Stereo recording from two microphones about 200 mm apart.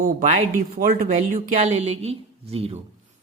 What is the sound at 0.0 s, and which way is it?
Speech, 40° right (ahead or behind).